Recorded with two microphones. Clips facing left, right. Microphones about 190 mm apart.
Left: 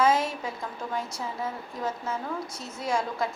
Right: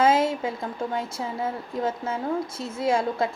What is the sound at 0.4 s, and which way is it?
A woman's voice, 30° right (ahead or behind).